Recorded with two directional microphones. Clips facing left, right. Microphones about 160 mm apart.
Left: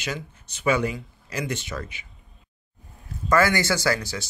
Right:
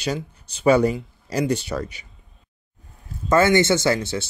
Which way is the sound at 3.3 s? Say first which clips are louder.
Right 5 dB; 25° right (ahead or behind).